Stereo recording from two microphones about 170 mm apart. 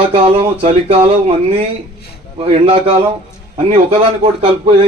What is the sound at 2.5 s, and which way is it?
Speech, 35° right (ahead or behind).